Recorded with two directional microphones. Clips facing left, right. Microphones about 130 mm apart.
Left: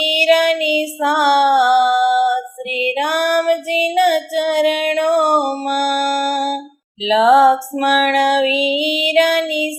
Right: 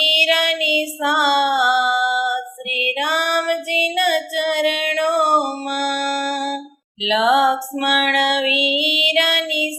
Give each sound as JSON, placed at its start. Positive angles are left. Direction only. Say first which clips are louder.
{"t": 0.0, "sound": "child singing", "louder": "left 6 dB", "side_deg": 40}
{"t": 7.0, "sound": "female singing", "louder": "left 5 dB", "side_deg": 40}